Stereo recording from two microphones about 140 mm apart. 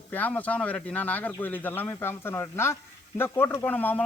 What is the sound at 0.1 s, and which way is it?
Speech, 10° left (ahead or behind).